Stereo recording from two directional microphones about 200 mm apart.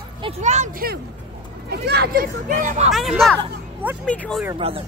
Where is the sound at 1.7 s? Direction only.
55° right (ahead or behind).